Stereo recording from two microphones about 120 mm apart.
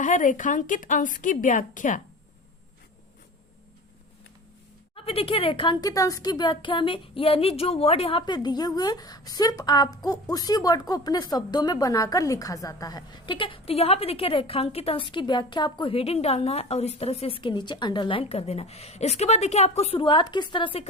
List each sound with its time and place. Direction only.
0.0 s a woman's voice: 90° left
4.9 s speech: 50° left (ahead or behind)
5.8 s speech: 30° left (ahead or behind); by 8.2 s 55° left (ahead or behind)
8.3 s a woman's voice: 35° left (ahead or behind); by 15.0 s 60° left (ahead or behind)
15.0 s a woman's voice: 40° left (ahead or behind)